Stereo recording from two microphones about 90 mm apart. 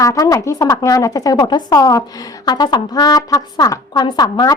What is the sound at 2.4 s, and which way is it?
A woman's voice, 50° left (ahead or behind).